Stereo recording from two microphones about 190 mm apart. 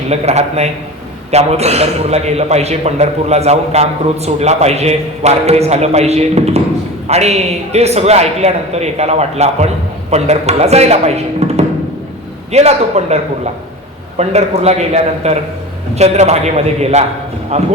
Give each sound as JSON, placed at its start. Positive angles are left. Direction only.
{"t": 0.1, "sound": "a man's voice", "side_deg": -35}